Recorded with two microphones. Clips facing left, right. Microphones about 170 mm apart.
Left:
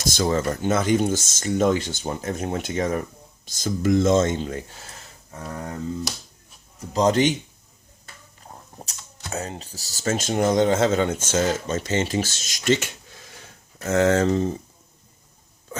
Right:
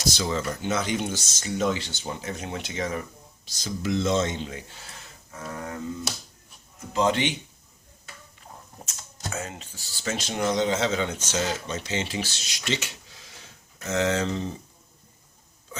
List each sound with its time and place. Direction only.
0.0 s speech: 50° left (ahead or behind)
6.7 s speech: 40° left (ahead or behind)
9.3 s speech: 35° left (ahead or behind)
15.7 s hiccup: 45° left (ahead or behind)